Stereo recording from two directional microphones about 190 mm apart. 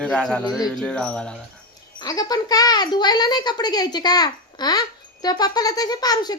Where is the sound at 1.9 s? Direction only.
20° left (ahead or behind).